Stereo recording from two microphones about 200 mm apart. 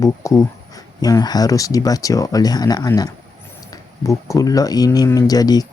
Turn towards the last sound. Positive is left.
turn(degrees=20)  # may be behind; listen again after turning